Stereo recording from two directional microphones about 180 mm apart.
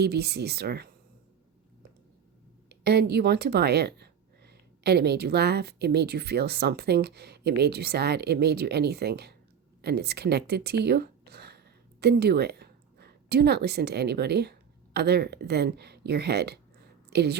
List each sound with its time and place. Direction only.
0.0 s speech: 65° right (ahead or behind)
2.6 s a woman's voice: 65° right (ahead or behind)